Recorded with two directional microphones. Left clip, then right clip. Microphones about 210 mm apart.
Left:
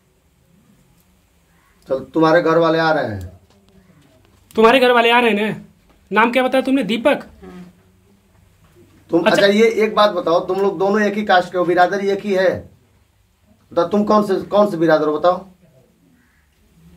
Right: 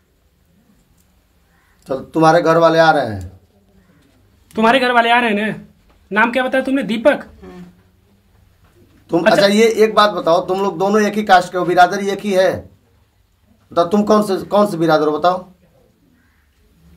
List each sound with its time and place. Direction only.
1.9 s speech: 40° right (ahead or behind)
4.5 s speech: 10° left (ahead or behind)
9.4 s speech: 40° right (ahead or behind)
13.7 s speech: 40° right (ahead or behind)